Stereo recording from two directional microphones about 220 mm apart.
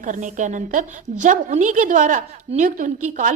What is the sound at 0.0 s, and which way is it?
A woman's voice, 35° right (ahead or behind).